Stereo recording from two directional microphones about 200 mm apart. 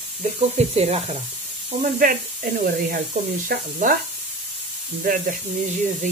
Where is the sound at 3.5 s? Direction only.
45° right (ahead or behind).